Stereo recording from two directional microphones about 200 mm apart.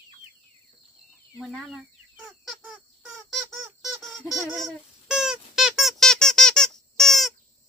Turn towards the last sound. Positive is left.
turn(degrees=0)  # may be behind; listen again after turning